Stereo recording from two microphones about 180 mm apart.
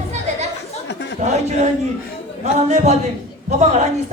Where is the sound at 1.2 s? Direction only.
40° right (ahead or behind).